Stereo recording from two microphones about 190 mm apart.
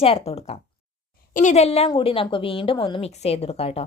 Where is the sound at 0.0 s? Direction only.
30° left (ahead or behind).